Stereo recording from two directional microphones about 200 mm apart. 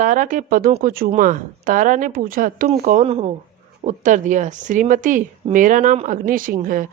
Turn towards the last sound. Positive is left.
turn(degrees=-45)  # may be behind; listen again after turning